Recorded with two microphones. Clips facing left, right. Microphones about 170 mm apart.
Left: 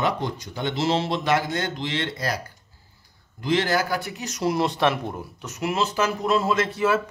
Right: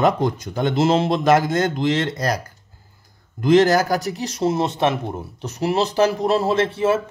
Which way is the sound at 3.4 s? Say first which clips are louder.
Right 8 dB; 45° right (ahead or behind).